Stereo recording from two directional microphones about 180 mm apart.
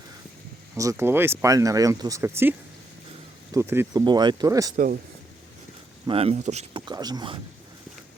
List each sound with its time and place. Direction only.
0.8 s speech: 15° right (ahead or behind)
6.1 s speech: 35° right (ahead or behind)
6.8 s speech: 20° right (ahead or behind)